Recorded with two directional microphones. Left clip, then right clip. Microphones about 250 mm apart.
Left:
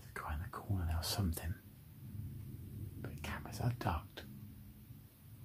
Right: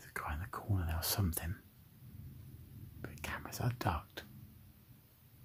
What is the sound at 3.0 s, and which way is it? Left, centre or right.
Whispering, right.